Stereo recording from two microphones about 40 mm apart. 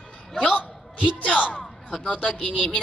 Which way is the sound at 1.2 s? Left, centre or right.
Left.